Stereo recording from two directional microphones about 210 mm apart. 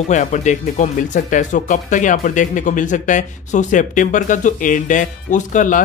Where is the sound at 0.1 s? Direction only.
35° left (ahead or behind).